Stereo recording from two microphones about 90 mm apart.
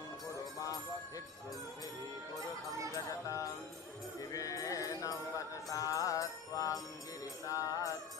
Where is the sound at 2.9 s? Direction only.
40° left (ahead or behind).